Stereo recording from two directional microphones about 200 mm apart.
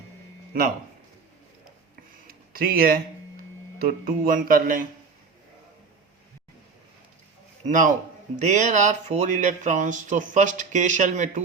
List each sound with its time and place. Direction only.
2.2 s speech: 45° right (ahead or behind)
7.7 s speech: 40° right (ahead or behind)